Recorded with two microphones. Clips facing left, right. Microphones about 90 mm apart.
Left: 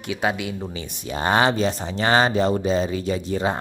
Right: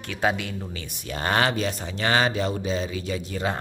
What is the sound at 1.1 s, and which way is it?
A man's voice, 20° left (ahead or behind).